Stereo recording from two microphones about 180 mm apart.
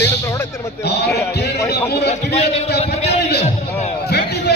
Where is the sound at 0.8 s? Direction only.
65° left (ahead or behind).